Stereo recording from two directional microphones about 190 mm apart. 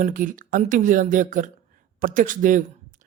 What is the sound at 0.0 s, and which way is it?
Speech, 45° right (ahead or behind).